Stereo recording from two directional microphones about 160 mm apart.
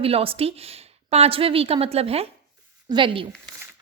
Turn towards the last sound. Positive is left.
turn(degrees=-30)  # may be behind; listen again after turning